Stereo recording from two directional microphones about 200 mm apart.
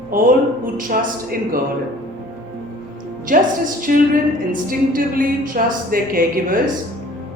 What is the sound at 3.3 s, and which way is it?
Speech, 45° right (ahead or behind).